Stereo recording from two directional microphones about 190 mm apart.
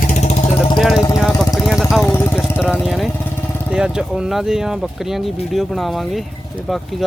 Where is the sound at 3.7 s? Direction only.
5° right (ahead or behind).